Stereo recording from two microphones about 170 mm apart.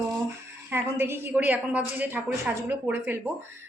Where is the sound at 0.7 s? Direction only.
15° right (ahead or behind).